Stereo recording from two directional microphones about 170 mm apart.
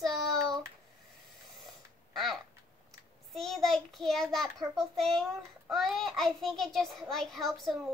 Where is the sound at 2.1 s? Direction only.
Centre (ahead or behind).